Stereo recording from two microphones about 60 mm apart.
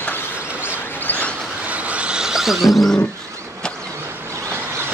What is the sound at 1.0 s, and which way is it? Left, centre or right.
Vehicle, left.